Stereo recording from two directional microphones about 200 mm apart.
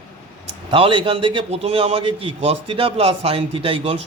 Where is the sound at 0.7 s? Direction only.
25° right (ahead or behind).